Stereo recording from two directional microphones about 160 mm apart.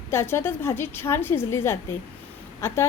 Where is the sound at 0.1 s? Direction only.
15° left (ahead or behind).